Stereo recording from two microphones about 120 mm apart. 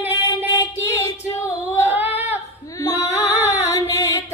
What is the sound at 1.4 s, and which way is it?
Female singing, 20° left (ahead or behind).